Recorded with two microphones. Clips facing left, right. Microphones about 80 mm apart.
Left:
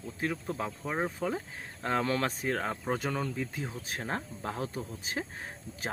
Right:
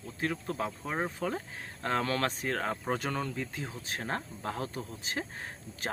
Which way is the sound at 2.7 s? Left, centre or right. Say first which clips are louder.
Even; centre.